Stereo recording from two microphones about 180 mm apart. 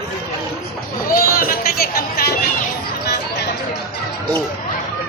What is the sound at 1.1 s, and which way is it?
Chatter, 50° left (ahead or behind).